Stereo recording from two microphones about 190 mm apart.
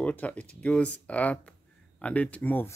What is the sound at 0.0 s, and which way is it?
Speech, 10° left (ahead or behind).